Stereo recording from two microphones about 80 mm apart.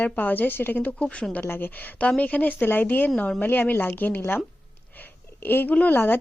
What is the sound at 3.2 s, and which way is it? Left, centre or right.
Speech, centre.